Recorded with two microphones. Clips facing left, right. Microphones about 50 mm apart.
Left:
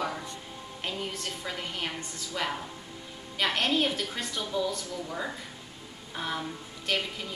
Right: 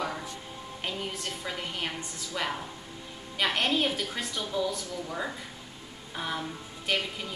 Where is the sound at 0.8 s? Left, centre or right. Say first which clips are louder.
Even; centre.